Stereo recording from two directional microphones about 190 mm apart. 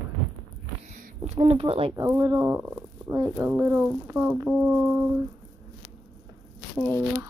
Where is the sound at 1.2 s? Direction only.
35° right (ahead or behind).